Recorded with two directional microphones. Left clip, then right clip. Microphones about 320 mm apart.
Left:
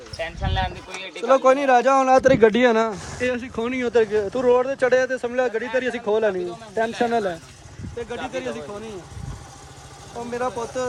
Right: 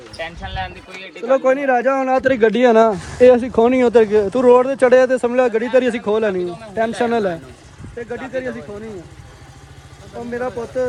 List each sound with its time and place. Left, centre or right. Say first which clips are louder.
0.4 s speech: left 1 dB; left
2.4 s speech: right 4 dB; centre
5.3 s speech: right 7 dB; right
5.8 s speech: right 4 dB; centre
6.3 s speech: right 4 dB; right
10.2 s speech: right 2 dB; centre